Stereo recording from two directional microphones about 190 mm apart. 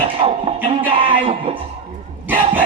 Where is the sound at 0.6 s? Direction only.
30° right (ahead or behind).